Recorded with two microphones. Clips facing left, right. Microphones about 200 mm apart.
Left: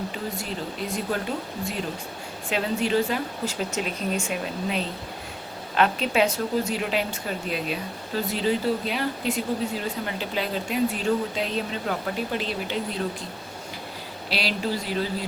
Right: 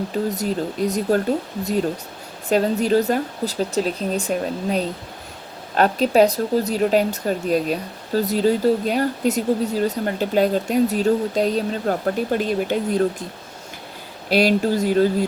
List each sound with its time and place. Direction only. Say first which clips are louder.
0.3 s speech: right 8 dB; 40° right (ahead or behind)
2.5 s speech: right 7 dB; 40° right (ahead or behind)
14.3 s speech: right 10 dB; 45° right (ahead or behind)